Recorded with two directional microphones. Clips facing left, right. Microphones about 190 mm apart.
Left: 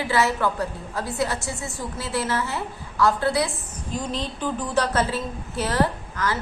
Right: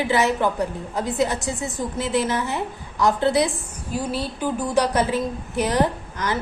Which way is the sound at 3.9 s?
10° right (ahead or behind).